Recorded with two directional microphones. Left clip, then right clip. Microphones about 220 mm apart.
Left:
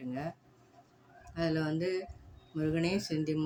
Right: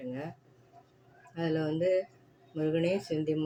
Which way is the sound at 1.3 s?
15° left (ahead or behind).